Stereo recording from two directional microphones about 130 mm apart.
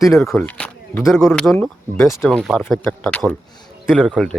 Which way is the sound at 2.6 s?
15° left (ahead or behind).